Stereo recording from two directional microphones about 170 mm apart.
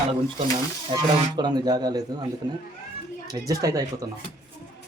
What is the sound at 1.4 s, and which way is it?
Speech, 25° right (ahead or behind).